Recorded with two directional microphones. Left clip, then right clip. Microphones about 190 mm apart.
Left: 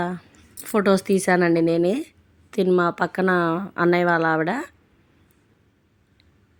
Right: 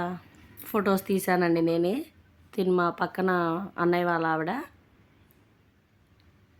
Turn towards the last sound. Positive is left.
turn(degrees=25)  # may be behind; listen again after turning